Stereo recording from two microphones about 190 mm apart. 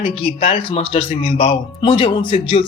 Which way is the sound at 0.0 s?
30° left (ahead or behind).